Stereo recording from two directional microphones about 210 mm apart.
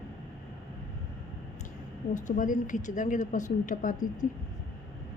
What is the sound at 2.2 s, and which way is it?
A woman's voice, 40° left (ahead or behind).